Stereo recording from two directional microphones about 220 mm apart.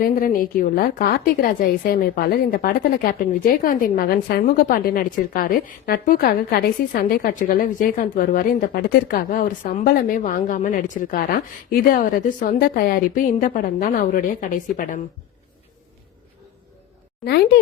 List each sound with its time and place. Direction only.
0.0 s a woman's voice: 40° left (ahead or behind)
17.2 s speech: 45° left (ahead or behind)